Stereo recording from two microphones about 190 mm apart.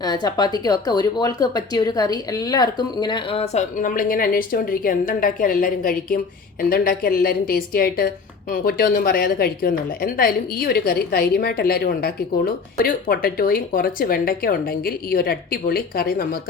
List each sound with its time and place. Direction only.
0.0 s a woman's voice: 20° left (ahead or behind); by 16.4 s 50° left (ahead or behind)